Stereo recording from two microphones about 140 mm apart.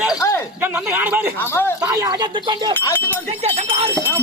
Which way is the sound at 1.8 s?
25° right (ahead or behind).